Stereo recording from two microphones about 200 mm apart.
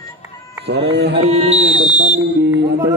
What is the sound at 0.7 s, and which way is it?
Speech, 60° right (ahead or behind).